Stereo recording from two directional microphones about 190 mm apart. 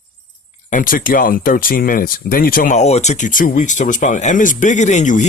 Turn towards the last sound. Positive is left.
turn(degrees=40)  # may be behind; listen again after turning